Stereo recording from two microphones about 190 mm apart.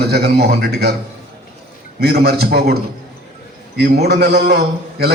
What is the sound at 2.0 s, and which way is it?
Speech, 55° right (ahead or behind).